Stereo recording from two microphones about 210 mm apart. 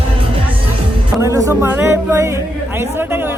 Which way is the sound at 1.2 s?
15° right (ahead or behind).